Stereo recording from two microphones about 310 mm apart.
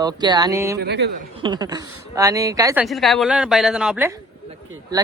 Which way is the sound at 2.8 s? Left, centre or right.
Centre.